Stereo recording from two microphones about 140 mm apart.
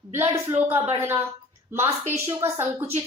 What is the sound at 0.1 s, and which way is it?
A woman's voice, 20° right (ahead or behind).